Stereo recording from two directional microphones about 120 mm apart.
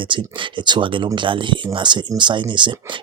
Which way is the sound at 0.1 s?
40° right (ahead or behind).